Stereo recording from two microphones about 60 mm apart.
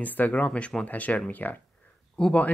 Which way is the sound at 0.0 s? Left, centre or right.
Left.